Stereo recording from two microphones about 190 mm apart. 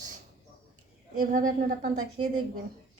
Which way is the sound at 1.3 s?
45° right (ahead or behind).